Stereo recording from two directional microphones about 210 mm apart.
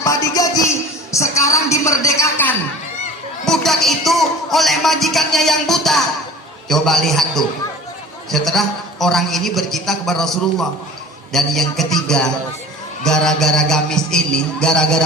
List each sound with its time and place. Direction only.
0.0 s music: 15° left (ahead or behind)
1.1 s speech: 15° left (ahead or behind)
3.4 s music: centre (ahead or behind)